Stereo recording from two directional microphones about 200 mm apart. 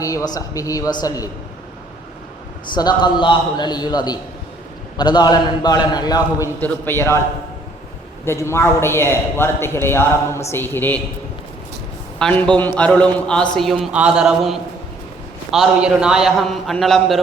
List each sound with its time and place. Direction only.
0.0 s a man's voice: 15° left (ahead or behind)
2.7 s a man's voice: 20° left (ahead or behind)
8.2 s a man's voice: 15° left (ahead or behind)
12.2 s a man's voice: 5° left (ahead or behind)